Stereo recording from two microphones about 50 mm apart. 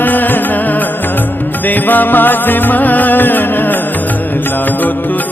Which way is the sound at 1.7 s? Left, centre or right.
Left.